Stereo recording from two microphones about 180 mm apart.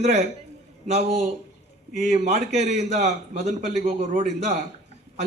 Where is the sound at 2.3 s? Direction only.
40° right (ahead or behind).